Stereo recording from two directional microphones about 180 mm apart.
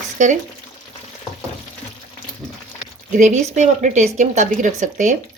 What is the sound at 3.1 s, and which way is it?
Speech, 40° right (ahead or behind).